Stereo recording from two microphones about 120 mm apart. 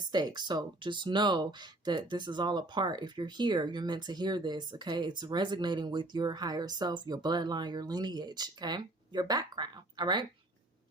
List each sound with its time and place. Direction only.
0.1 s speech: 35° right (ahead or behind)